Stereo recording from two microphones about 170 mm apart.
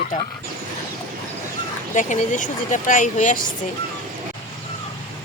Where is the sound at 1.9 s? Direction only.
50° left (ahead or behind).